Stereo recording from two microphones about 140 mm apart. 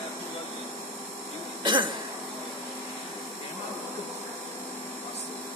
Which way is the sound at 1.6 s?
35° right (ahead or behind).